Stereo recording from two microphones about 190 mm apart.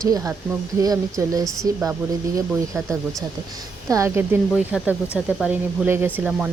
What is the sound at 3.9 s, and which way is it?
Speech, 15° right (ahead or behind).